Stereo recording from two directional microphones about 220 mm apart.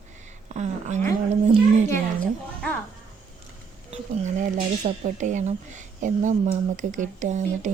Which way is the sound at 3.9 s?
30° right (ahead or behind).